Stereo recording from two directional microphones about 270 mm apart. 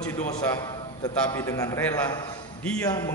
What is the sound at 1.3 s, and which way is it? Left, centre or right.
Speech, centre.